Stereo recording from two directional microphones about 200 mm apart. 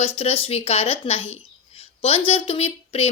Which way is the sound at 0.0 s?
30° left (ahead or behind).